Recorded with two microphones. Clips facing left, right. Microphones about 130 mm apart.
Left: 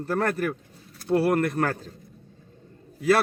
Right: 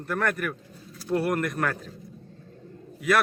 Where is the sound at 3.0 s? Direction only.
30° left (ahead or behind).